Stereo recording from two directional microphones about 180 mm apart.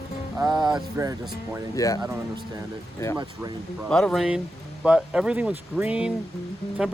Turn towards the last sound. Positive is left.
turn(degrees=-5)  # may be behind; listen again after turning